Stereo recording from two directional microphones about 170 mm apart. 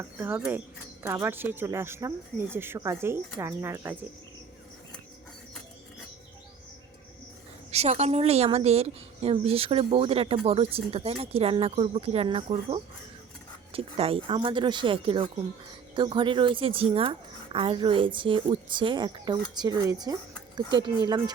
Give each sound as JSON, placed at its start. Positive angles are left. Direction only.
{"t": 0.0, "sound": "speech", "side_deg": -15}
{"t": 7.7, "sound": "a woman's voice", "side_deg": -40}